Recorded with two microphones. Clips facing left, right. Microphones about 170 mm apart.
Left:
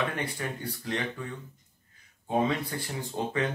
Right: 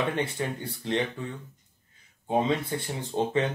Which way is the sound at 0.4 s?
25° right (ahead or behind).